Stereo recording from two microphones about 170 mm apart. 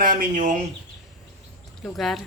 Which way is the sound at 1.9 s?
Centre (ahead or behind).